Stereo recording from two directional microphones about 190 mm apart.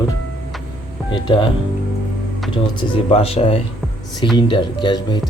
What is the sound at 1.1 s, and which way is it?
Speech, 25° left (ahead or behind).